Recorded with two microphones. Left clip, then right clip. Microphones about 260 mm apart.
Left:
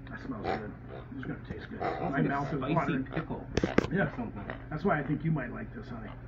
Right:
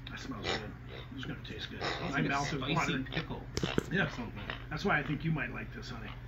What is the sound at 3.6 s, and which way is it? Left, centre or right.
A woman's voice, centre.